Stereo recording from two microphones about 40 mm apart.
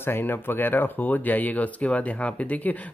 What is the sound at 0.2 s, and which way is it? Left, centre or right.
Speech, left.